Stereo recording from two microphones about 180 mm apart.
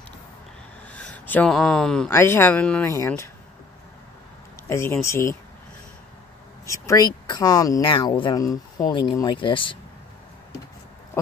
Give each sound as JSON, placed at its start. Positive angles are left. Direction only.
{"t": 0.8, "sound": "speech", "side_deg": 5}
{"t": 4.6, "sound": "speech", "side_deg": 15}
{"t": 6.6, "sound": "speech", "side_deg": 15}